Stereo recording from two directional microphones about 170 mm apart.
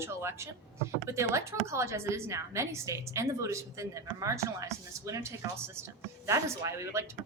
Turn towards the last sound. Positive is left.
turn(degrees=-15)  # may be behind; listen again after turning